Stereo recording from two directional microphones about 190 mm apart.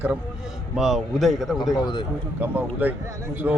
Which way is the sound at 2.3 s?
10° right (ahead or behind).